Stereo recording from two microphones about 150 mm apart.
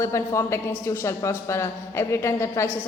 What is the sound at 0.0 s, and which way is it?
A man's voice, 20° left (ahead or behind).